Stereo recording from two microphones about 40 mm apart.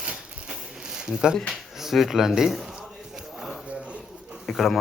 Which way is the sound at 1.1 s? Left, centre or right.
Centre.